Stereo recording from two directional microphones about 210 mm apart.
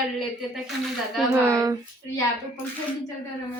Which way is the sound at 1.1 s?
Centre (ahead or behind).